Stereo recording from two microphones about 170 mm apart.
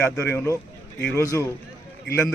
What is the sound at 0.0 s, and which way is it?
A man's voice, 10° left (ahead or behind).